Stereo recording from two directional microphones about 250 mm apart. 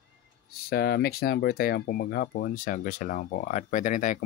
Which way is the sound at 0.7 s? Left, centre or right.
Left.